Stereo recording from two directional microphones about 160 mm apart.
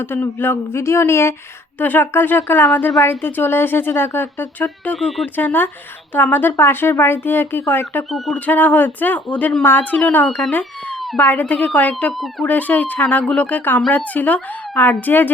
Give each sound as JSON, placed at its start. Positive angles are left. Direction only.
{"t": 0.0, "sound": "speech", "side_deg": 15}
{"t": 4.9, "sound": "speech", "side_deg": 0}